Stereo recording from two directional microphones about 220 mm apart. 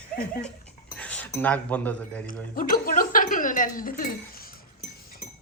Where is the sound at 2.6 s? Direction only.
40° left (ahead or behind).